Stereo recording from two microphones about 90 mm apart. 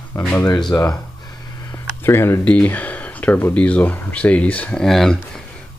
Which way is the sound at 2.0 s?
30° left (ahead or behind).